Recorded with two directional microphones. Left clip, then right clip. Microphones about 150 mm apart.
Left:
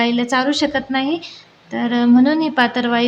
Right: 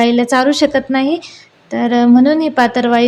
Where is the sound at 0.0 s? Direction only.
35° right (ahead or behind).